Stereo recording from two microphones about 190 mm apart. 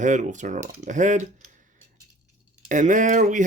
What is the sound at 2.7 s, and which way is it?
Speech, 40° right (ahead or behind).